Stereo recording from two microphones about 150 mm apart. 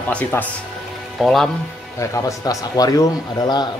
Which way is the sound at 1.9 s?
20° left (ahead or behind).